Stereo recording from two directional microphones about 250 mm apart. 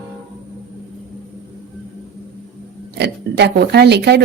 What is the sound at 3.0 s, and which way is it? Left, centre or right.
A woman's voice, right.